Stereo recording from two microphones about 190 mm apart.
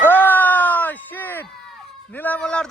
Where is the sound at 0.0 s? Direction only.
10° left (ahead or behind).